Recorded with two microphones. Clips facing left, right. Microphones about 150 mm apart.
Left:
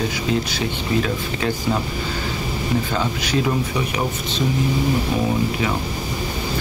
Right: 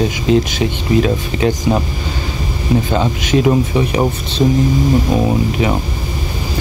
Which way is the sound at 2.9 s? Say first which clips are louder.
Right 6 dB; 20° right (ahead or behind).